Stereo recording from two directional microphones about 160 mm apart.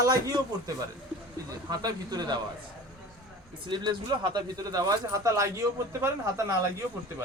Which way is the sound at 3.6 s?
30° right (ahead or behind).